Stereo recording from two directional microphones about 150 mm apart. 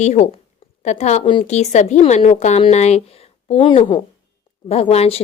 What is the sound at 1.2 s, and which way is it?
Speech, 35° left (ahead or behind).